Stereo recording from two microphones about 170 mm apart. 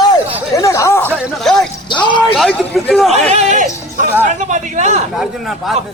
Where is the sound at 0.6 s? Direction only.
20° left (ahead or behind).